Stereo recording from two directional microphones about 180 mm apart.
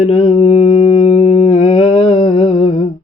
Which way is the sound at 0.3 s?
25° left (ahead or behind).